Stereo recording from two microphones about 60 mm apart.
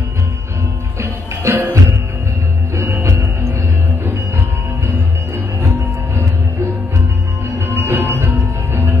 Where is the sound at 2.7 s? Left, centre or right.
Right.